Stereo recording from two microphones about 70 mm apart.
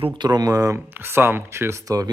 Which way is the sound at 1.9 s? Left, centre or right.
Right.